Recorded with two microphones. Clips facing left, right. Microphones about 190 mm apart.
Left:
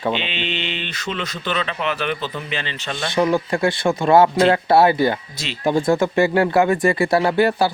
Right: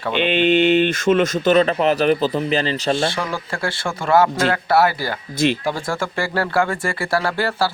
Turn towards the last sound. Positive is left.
turn(degrees=20)  # may be behind; listen again after turning